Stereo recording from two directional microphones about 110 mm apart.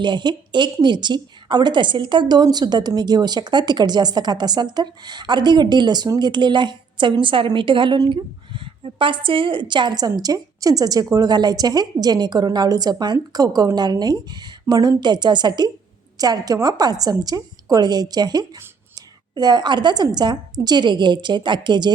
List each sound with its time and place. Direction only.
0.0 s a woman's voice: 45° right (ahead or behind)